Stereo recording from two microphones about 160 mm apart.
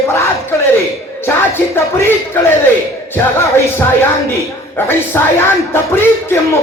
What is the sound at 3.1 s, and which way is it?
Speech, 15° left (ahead or behind).